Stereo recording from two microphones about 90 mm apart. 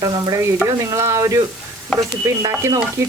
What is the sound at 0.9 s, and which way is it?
Speech, 30° right (ahead or behind).